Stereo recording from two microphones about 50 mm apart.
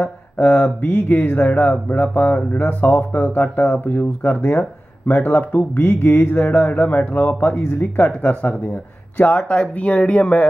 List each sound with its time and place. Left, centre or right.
0.0 s mantra: left
0.8 s speech: left
8.2 s speech: left